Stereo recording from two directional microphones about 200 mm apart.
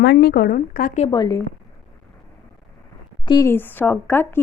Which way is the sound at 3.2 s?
20° left (ahead or behind).